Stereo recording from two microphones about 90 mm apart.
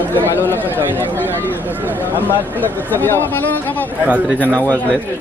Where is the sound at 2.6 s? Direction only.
20° left (ahead or behind).